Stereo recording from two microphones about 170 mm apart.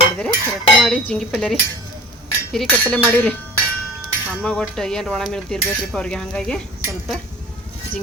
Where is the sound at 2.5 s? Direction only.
5° left (ahead or behind).